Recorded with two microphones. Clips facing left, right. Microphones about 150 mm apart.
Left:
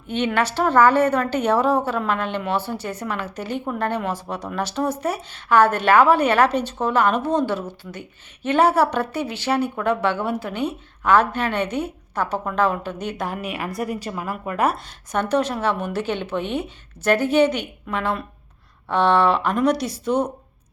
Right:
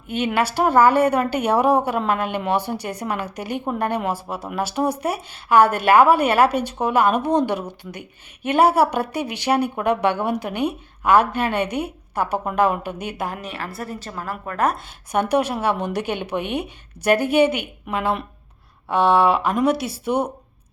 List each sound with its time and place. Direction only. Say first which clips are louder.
0.3 s a woman's voice: right 1 dB; 10° right (ahead or behind)
13.2 s a woman's voice: even; centre (ahead or behind)
13.5 s a woman's voice: left 4 dB; 15° left (ahead or behind)
15.1 s a woman's voice: right 1 dB; 10° right (ahead or behind)
18.9 s a woman's voice: right 1 dB; 5° right (ahead or behind)